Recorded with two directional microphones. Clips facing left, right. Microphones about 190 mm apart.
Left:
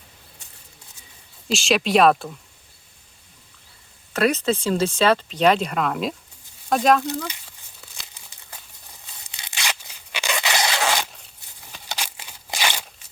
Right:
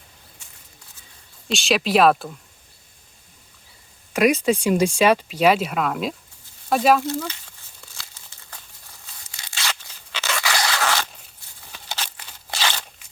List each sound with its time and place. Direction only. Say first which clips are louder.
1.5 s speech: left 1 dB; centre (ahead or behind)
4.1 s speech: right 2 dB; 10° right (ahead or behind)
7.9 s tearing: right 1 dB; 15° left (ahead or behind)